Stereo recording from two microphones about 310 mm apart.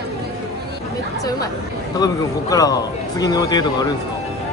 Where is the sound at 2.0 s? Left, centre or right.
Centre.